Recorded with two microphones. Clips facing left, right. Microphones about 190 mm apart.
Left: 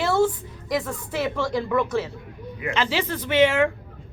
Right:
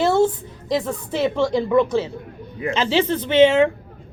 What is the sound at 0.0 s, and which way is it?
A woman's voice, 25° right (ahead or behind).